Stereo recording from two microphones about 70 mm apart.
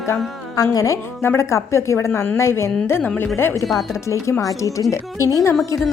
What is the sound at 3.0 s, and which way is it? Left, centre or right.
Speech, left.